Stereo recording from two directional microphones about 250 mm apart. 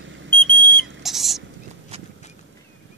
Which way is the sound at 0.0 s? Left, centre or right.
Right.